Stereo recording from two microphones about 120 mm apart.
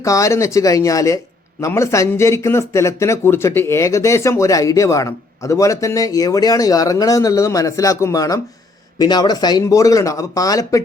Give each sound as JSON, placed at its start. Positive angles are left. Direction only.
{"t": 0.0, "sound": "speech", "side_deg": 25}